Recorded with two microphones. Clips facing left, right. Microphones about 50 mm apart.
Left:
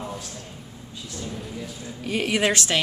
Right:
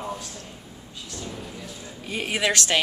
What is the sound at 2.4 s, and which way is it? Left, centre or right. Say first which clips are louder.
Speech: even; left.